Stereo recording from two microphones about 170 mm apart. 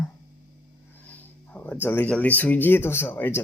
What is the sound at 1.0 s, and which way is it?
Speech, 10° left (ahead or behind).